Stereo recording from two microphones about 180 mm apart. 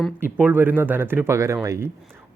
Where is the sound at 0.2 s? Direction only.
10° right (ahead or behind).